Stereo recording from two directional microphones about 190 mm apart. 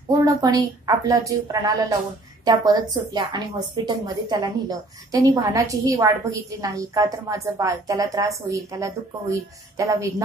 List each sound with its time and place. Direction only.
0.1 s a woman's voice: 20° right (ahead or behind)